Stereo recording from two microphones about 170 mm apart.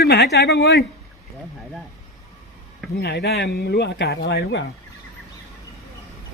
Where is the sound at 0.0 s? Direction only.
75° left (ahead or behind).